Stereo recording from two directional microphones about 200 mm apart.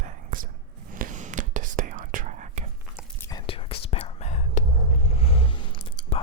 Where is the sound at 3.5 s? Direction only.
25° left (ahead or behind).